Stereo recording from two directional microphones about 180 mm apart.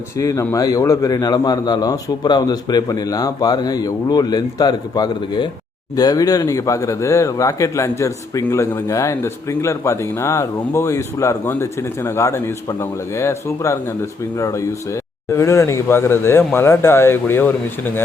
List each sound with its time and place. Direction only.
0.2 s a man's voice: 20° left (ahead or behind)